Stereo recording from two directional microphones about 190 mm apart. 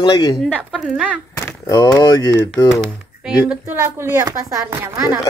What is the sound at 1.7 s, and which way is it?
Speech, 20° left (ahead or behind).